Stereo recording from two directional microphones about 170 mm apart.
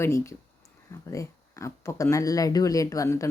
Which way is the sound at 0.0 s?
15° left (ahead or behind).